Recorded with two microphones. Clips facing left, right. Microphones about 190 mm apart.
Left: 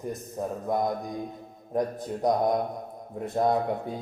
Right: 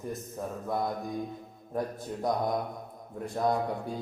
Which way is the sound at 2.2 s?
20° left (ahead or behind).